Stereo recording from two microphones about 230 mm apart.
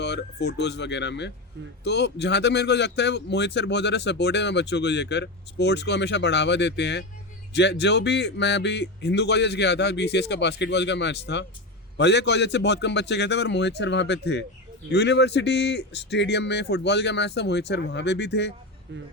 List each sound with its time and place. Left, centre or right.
0.0 s speech: left